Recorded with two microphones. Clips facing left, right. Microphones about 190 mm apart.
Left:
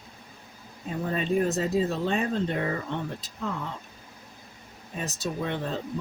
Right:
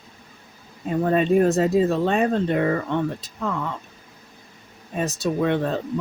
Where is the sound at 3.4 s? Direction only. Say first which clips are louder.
Right 6 dB; 70° right (ahead or behind).